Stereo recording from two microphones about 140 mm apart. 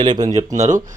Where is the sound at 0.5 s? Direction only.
60° right (ahead or behind).